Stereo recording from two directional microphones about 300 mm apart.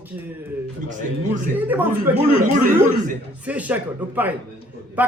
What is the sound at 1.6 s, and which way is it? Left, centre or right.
Speech, centre.